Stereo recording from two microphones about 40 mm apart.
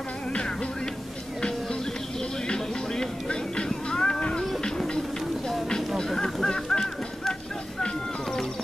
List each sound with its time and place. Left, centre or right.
0.3 s music: left
2.4 s music: centre
5.9 s honk: centre
6.4 s music: centre
7.8 s music: centre